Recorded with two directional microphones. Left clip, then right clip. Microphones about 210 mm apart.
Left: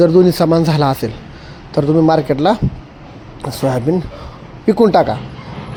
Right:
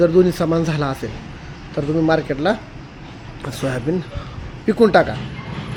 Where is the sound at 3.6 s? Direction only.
20° left (ahead or behind).